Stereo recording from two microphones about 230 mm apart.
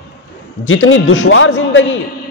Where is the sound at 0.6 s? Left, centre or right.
Left.